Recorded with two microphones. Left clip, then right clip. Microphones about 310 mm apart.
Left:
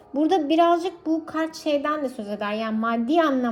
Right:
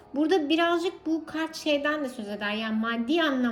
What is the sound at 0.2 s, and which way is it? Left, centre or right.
A woman's voice, centre.